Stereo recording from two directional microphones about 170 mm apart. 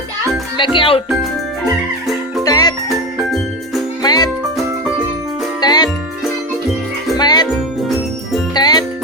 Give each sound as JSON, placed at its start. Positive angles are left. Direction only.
{"t": 0.5, "sound": "speech", "side_deg": 30}
{"t": 2.4, "sound": "music", "side_deg": 20}
{"t": 4.0, "sound": "music", "side_deg": 25}
{"t": 5.5, "sound": "music", "side_deg": 25}
{"t": 7.2, "sound": "music", "side_deg": 25}
{"t": 7.5, "sound": "jingle bell", "side_deg": 0}
{"t": 8.5, "sound": "music", "side_deg": 25}